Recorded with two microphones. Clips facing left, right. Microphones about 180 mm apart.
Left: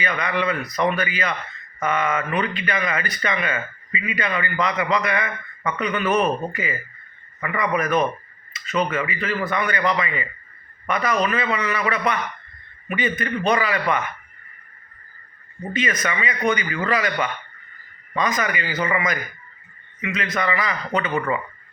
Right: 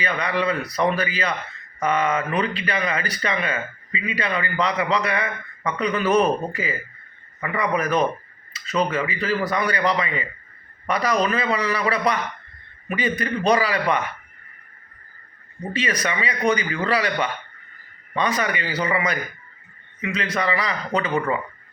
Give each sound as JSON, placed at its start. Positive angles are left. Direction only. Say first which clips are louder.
{"t": 0.0, "sound": "a man's voice", "louder": "even", "side_deg": -30}
{"t": 13.1, "sound": "a man's voice", "louder": "right 2 dB", "side_deg": -35}
{"t": 15.7, "sound": "a man's voice", "louder": "even", "side_deg": -35}
{"t": 18.1, "sound": "a man's voice", "louder": "even", "side_deg": -30}